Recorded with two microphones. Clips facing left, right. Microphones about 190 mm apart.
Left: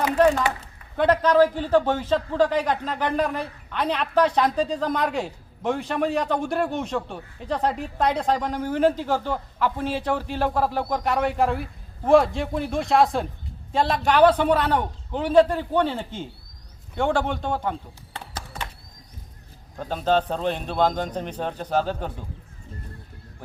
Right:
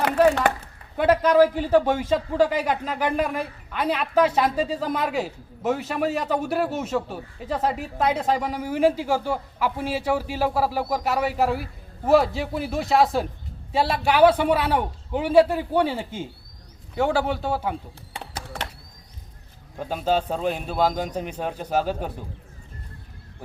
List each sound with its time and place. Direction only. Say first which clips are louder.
0.9 s a man's voice: right 1 dB; 10° right (ahead or behind)
19.7 s a man's voice: left 1 dB; 10° right (ahead or behind)